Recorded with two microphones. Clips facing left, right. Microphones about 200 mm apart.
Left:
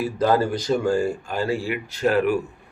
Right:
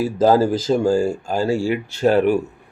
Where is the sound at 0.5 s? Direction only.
25° right (ahead or behind).